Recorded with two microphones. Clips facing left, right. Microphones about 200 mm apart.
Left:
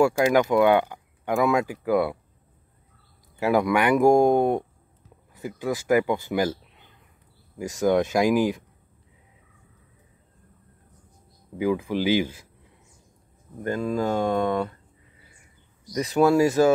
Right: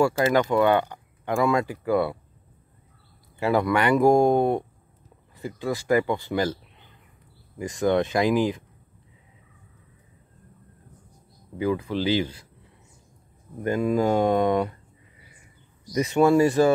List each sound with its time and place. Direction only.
0.0 s speech: 15° left (ahead or behind)
3.3 s speech: 10° left (ahead or behind)
11.5 s speech: 10° left (ahead or behind)
13.6 s speech: 10° right (ahead or behind)
15.9 s speech: centre (ahead or behind)